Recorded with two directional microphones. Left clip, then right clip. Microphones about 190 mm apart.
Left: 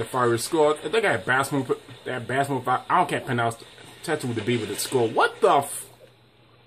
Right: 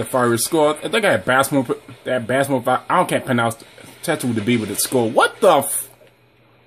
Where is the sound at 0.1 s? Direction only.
40° right (ahead or behind).